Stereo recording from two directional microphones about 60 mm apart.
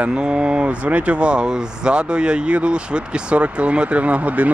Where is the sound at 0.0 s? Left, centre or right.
Centre.